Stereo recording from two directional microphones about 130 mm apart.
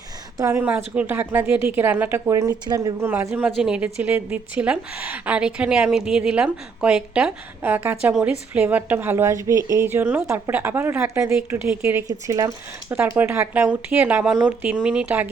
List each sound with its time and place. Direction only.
0.3 s a woman's voice: 25° right (ahead or behind)
0.6 s a woman's voice: 10° right (ahead or behind); by 2.9 s 30° right (ahead or behind)
3.0 s a woman's voice: 20° right (ahead or behind)
3.5 s a woman's voice: 5° right (ahead or behind)
12.0 s speech: 25° right (ahead or behind)
12.9 s a woman's voice: 15° right (ahead or behind)